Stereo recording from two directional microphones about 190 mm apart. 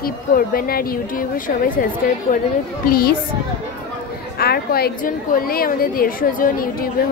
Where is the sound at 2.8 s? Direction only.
50° left (ahead or behind).